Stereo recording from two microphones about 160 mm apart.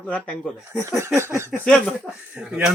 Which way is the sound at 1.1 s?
15° right (ahead or behind).